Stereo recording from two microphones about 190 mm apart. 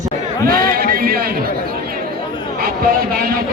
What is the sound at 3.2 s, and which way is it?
Speech, 50° right (ahead or behind).